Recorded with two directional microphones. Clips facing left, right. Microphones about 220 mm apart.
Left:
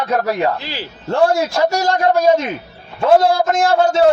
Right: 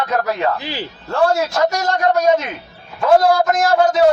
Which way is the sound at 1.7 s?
30° left (ahead or behind).